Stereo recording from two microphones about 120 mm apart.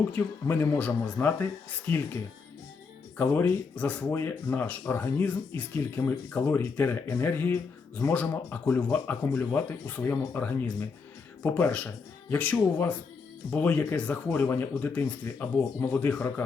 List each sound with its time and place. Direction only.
0.1 s speech: 15° left (ahead or behind)
3.2 s speech: 15° left (ahead or behind)